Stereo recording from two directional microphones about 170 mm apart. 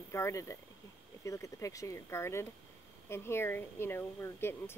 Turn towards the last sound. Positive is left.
turn(degrees=15)  # may be behind; listen again after turning